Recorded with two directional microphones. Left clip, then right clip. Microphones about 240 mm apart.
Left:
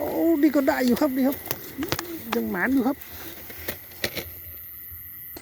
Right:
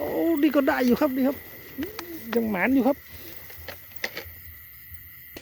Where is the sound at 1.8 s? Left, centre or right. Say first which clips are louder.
Left 4 dB; left.